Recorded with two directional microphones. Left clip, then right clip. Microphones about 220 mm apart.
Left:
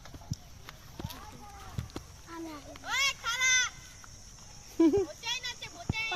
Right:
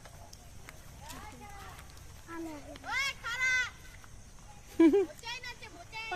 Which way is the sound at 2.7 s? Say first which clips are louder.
Left 4 dB; 10° left (ahead or behind).